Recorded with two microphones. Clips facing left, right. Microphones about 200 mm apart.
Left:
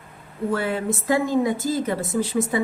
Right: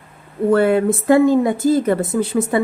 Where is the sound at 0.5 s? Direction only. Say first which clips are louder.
Right 10 dB; 55° right (ahead or behind).